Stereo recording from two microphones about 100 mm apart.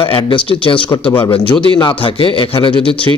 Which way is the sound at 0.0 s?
60° left (ahead or behind).